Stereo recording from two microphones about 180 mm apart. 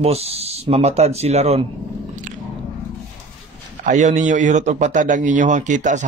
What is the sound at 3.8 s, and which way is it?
A man's voice, 45° right (ahead or behind).